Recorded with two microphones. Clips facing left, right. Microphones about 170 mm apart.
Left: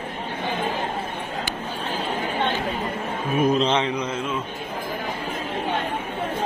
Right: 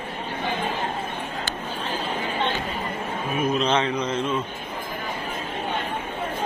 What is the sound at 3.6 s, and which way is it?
Speech, 20° left (ahead or behind).